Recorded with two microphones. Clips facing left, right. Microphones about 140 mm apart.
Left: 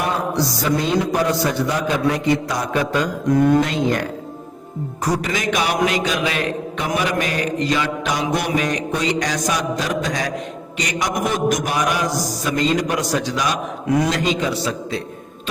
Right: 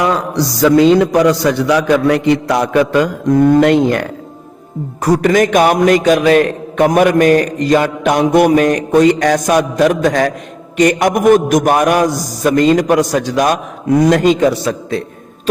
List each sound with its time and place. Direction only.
0.0 s a man's voice: 90° right; by 4.0 s 60° right (ahead or behind)
5.0 s a man's voice: 60° right (ahead or behind)